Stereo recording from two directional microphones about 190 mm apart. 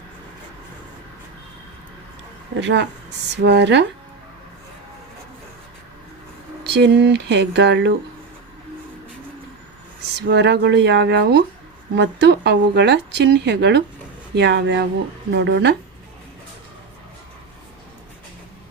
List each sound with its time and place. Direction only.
2.6 s speech: 65° right (ahead or behind)
6.7 s speech: 65° right (ahead or behind)
10.2 s speech: 65° right (ahead or behind)